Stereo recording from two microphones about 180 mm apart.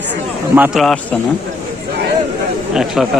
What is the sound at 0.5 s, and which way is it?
Speech, 10° right (ahead or behind).